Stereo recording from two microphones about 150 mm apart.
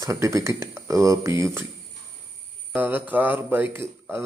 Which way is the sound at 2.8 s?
10° right (ahead or behind).